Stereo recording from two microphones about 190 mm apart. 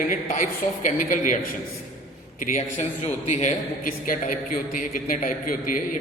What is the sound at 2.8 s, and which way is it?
A man's voice, 35° left (ahead or behind).